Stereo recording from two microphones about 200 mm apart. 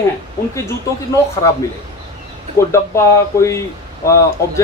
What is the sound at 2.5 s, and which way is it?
Speech, 15° left (ahead or behind).